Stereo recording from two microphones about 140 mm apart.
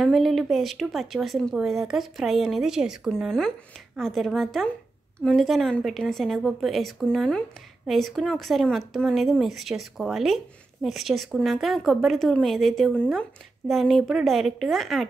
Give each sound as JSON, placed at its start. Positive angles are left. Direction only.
{"t": 0.0, "sound": "a woman's voice", "side_deg": 0}